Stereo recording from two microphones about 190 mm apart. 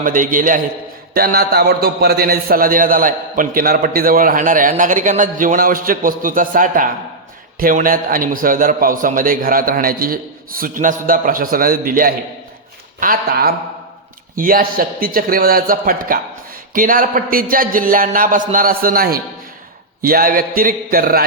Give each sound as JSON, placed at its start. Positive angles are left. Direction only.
{"t": 0.0, "sound": "a man's voice", "side_deg": -45}